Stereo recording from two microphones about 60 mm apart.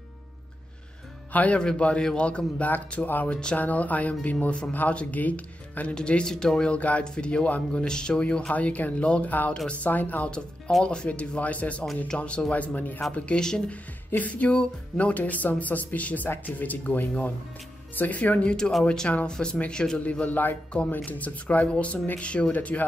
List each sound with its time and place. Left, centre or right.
1.3 s speech: left
3.5 s music: left
7.1 s speech: centre
7.8 s music: centre
18.9 s speech: centre
19.7 s music: centre